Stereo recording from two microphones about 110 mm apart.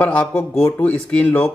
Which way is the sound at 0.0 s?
15° left (ahead or behind).